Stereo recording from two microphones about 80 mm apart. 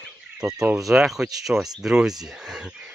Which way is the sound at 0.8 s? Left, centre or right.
Centre.